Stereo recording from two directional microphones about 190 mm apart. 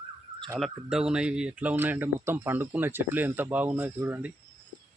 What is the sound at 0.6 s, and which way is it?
Speech, 5° right (ahead or behind).